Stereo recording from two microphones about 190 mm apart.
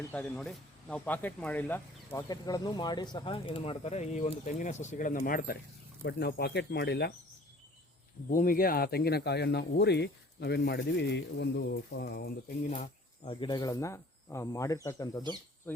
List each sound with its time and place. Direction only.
0.1 s speech: 5° left (ahead or behind); by 5.5 s 45° left (ahead or behind)
6.0 s speech: 60° left (ahead or behind)
8.3 s speech: 50° left (ahead or behind)
12.6 s speech: 40° left (ahead or behind); by 15.2 s 15° left (ahead or behind)